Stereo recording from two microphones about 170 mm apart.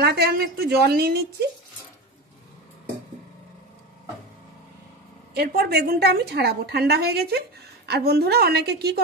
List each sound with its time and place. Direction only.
0.0 s a woman's voice: 65° right (ahead or behind)
5.3 s a woman's voice: 70° right (ahead or behind)